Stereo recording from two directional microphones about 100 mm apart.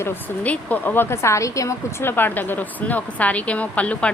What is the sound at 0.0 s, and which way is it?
A woman's voice, 25° left (ahead or behind).